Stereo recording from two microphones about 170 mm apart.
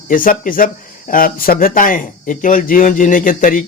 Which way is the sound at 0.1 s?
55° left (ahead or behind).